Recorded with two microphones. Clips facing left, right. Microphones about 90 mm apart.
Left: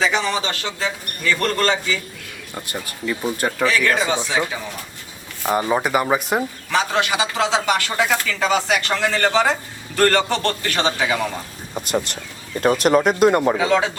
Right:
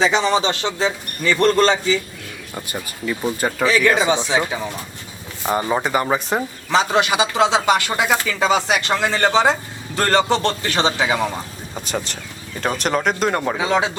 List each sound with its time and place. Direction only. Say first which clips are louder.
0.0 s speech: right 4 dB; 20° right (ahead or behind)
2.6 s speech: even; 5° right (ahead or behind); by 4.6 s 20° right (ahead or behind)
5.5 s speech: left 1 dB; centre (ahead or behind)
6.7 s speech: right 4 dB; 20° right (ahead or behind)
11.7 s speech: left 4 dB; 10° left (ahead or behind)
13.6 s speech: left 1 dB; 20° right (ahead or behind)